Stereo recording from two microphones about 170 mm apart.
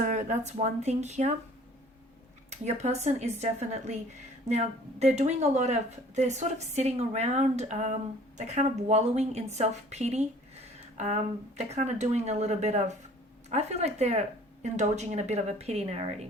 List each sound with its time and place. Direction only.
0.0 s speech: 45° right (ahead or behind)
2.6 s speech: 40° right (ahead or behind)